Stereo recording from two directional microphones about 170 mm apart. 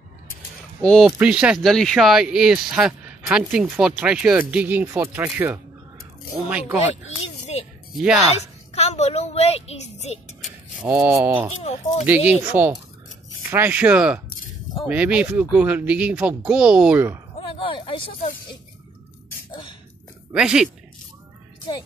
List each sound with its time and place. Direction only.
0.8 s speech: centre (ahead or behind)
7.9 s speech: 5° right (ahead or behind)
8.7 s a child's voice: 40° left (ahead or behind)
10.4 s a sound: centre (ahead or behind)
10.9 s speech: 10° right (ahead or behind)
11.6 s a child's voice: 40° left (ahead or behind)
12.3 s speech: 10° right (ahead or behind)
17.4 s a sound: 30° left (ahead or behind)
20.3 s speech: 5° right (ahead or behind)